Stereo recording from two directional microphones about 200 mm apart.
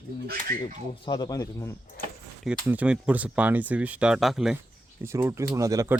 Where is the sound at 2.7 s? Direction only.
5° right (ahead or behind).